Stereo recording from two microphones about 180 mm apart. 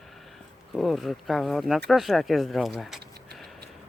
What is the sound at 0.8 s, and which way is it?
Speech, centre (ahead or behind).